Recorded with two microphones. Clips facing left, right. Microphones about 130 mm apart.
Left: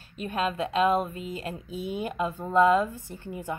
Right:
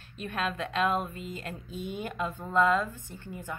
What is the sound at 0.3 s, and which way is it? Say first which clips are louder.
A woman's voice: left 5 dB; 10° left (ahead or behind).